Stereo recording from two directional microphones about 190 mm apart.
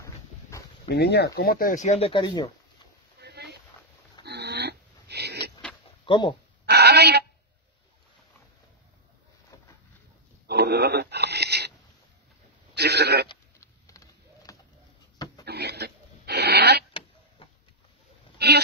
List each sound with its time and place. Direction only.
0.0 s dog: 15° left (ahead or behind)
0.8 s speech: 60° left (ahead or behind); by 2.5 s 25° left (ahead or behind)
3.2 s boat: 60° right (ahead or behind)
4.2 s pig: 60° right (ahead or behind)
6.0 s speech: 25° left (ahead or behind)
6.6 s radio: 60° right (ahead or behind)
9.5 s a sound: 15° left (ahead or behind)
10.4 s a sound: 60° right (ahead or behind)
12.7 s a sound: 60° right (ahead or behind)
13.3 s vehicle: 15° left (ahead or behind)
15.4 s dog: 60° right (ahead or behind)